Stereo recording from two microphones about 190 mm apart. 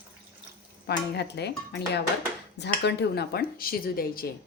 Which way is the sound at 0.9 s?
60° left (ahead or behind).